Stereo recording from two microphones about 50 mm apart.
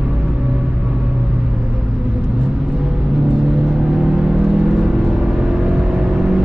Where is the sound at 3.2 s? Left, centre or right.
Centre.